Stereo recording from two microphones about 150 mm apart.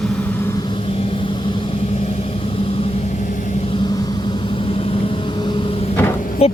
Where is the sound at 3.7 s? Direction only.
35° left (ahead or behind).